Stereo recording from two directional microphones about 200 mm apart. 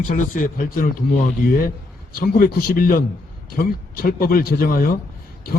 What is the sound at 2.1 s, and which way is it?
A man's voice, 50° left (ahead or behind).